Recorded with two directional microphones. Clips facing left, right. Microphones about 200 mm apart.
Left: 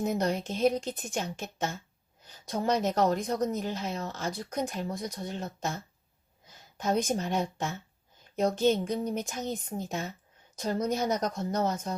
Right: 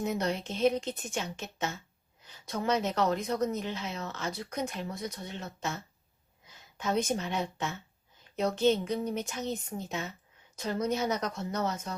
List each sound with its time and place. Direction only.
0.0 s speech: 45° left (ahead or behind)